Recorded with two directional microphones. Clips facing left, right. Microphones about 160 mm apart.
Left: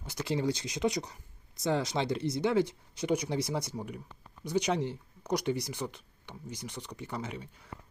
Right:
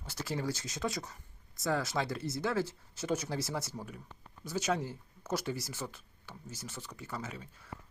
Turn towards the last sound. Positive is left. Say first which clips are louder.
# left 4 dB
turn(degrees=20)  # may be behind; listen again after turning